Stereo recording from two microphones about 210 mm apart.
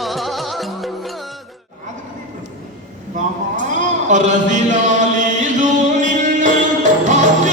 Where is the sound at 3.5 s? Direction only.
35° right (ahead or behind).